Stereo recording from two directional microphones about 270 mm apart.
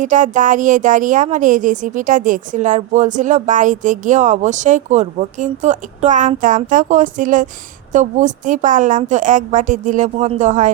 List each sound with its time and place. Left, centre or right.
0.0 s a woman's voice: right